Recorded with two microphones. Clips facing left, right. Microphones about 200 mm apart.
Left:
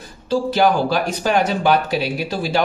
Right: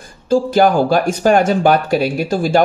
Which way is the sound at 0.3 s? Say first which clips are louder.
Right 4 dB; 45° right (ahead or behind).